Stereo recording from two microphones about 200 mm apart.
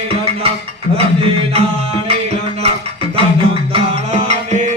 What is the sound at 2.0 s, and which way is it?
Music, 30° right (ahead or behind).